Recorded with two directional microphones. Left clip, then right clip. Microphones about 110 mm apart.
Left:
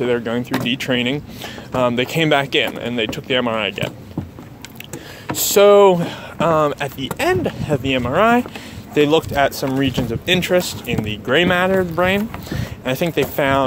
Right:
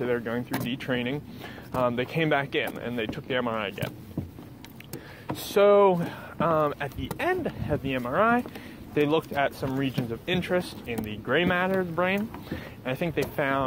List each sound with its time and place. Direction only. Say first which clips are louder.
0.0 s speech: left 9 dB; 30° left (ahead or behind)
5.4 s speech: left 9 dB; 30° left (ahead or behind)